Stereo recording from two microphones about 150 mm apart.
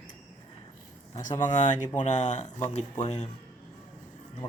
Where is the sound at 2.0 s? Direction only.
50° left (ahead or behind).